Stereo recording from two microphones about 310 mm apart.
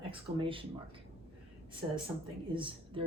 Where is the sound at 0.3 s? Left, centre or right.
Centre.